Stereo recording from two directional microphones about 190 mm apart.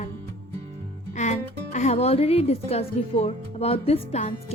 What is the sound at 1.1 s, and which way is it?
Speech, 40° left (ahead or behind).